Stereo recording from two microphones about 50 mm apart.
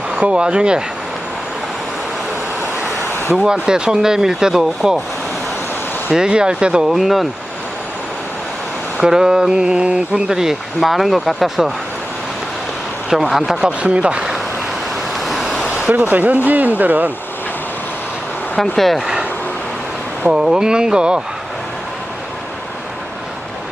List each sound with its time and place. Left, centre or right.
0.2 s speech: centre
3.3 s speech: centre
6.1 s speech: centre
6.8 s speech: centre
9.0 s speech: centre
13.1 s speech: centre
13.6 s speech: right
15.2 s vehicle: centre
15.6 s a sound: centre
15.9 s speech: right
18.6 s speech: centre
18.9 s a sound: centre
20.2 s speech: centre